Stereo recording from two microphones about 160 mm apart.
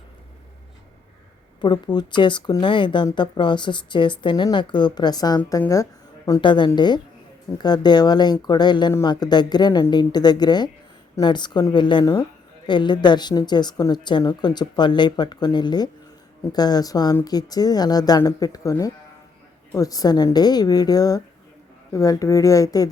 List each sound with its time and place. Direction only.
1.6 s speech: 25° left (ahead or behind)